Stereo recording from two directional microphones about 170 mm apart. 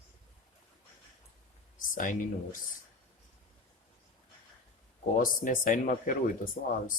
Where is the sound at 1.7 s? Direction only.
50° left (ahead or behind).